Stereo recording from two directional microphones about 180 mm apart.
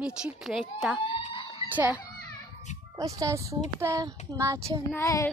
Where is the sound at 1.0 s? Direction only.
30° left (ahead or behind).